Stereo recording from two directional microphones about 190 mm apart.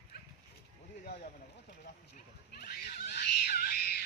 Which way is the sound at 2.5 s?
55° left (ahead or behind).